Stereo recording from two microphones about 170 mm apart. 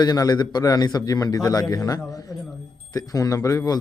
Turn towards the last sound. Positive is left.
turn(degrees=20)  # may be behind; listen again after turning